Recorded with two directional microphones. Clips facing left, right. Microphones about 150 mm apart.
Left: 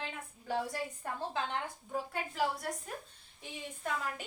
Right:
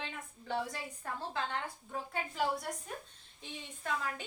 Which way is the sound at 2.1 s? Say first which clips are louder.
Right 2 dB; centre (ahead or behind).